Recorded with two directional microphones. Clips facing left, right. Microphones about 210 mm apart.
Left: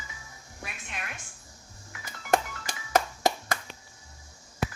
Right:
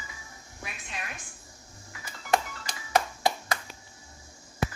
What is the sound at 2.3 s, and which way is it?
Music, 45° left (ahead or behind).